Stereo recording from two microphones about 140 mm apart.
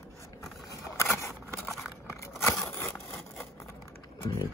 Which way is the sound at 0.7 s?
20° left (ahead or behind).